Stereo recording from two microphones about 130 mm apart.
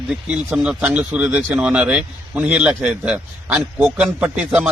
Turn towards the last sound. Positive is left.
turn(degrees=-10)  # may be behind; listen again after turning